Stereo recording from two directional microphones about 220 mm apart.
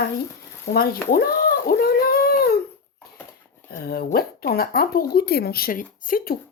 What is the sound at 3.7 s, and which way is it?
Speech, 45° left (ahead or behind).